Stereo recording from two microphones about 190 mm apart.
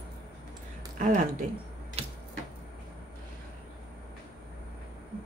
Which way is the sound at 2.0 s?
30° right (ahead or behind).